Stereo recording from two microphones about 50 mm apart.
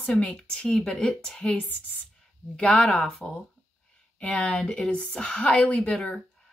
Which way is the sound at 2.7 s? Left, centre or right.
Left.